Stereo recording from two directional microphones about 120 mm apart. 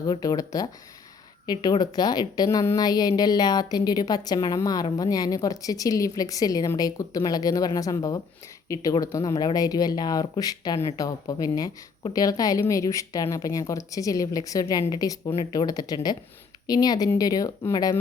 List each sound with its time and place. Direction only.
0.0 s a woman's voice: 30° left (ahead or behind)